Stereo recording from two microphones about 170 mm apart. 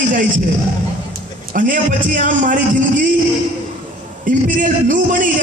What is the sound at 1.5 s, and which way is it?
A man's voice, 50° right (ahead or behind).